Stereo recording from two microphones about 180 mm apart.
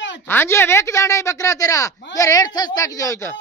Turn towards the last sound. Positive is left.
turn(degrees=15)  # may be behind; listen again after turning